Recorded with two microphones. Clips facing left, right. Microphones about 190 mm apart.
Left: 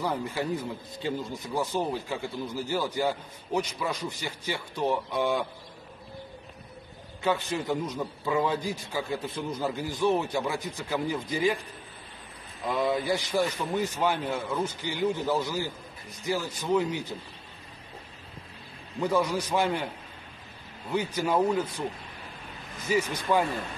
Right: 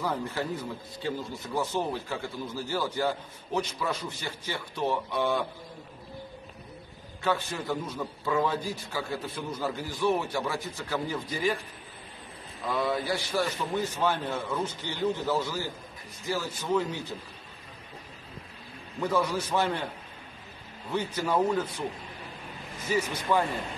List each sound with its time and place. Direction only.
0.0 s speech: 15° left (ahead or behind)
7.2 s speech: 20° left (ahead or behind)
12.6 s speech: 20° left (ahead or behind)
18.9 s speech: 15° left (ahead or behind)
20.9 s speech: 10° left (ahead or behind)
23.1 s speech: 15° left (ahead or behind)